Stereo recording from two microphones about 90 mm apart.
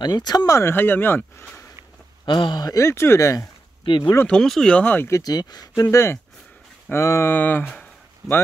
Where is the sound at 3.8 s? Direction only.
80° left.